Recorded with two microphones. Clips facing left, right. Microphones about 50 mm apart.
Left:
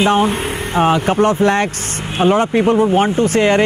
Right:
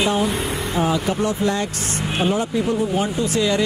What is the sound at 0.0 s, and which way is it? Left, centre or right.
Speech, left.